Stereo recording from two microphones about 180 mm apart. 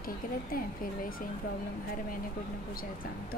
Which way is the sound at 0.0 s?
55° left (ahead or behind).